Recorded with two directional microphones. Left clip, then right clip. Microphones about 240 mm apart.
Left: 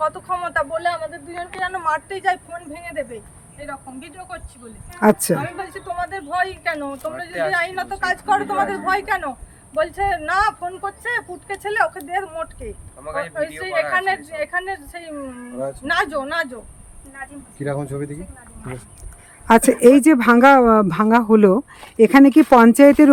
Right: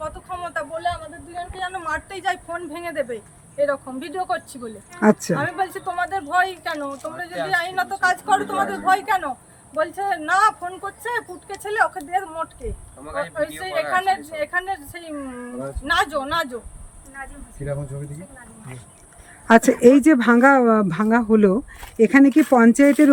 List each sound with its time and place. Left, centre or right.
0.0 s speech: centre
3.6 s speech: centre
5.0 s speech: centre
17.2 s speech: centre
19.5 s speech: centre